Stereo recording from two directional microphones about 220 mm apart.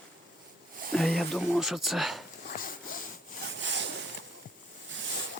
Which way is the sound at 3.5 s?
55° right (ahead or behind).